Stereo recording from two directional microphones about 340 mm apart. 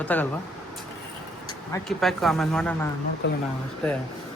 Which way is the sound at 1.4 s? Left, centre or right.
Centre.